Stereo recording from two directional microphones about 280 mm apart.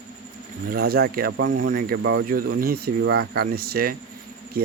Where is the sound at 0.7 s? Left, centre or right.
Right.